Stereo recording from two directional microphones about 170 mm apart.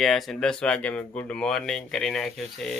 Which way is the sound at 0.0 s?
Centre (ahead or behind).